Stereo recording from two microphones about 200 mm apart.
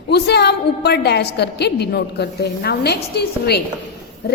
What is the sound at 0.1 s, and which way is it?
A woman's voice, 55° left (ahead or behind).